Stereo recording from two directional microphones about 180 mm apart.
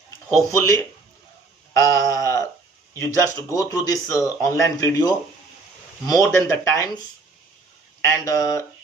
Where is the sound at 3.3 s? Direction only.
20° left (ahead or behind).